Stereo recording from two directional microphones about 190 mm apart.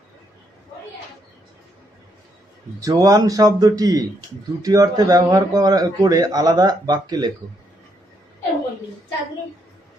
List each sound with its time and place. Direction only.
2.8 s a man's voice: 20° right (ahead or behind)